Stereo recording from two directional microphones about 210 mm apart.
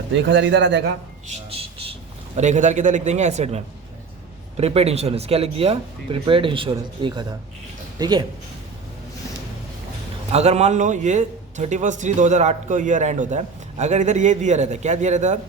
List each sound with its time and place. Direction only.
0.1 s a man's voice: 60° right (ahead or behind)
1.3 s a man's voice: 25° right (ahead or behind)
10.3 s a man's voice: 30° right (ahead or behind)